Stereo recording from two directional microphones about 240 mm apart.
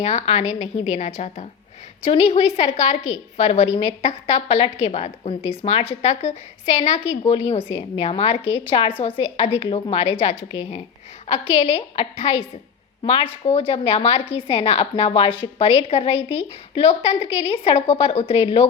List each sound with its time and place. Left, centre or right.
0.0 s a woman's voice: left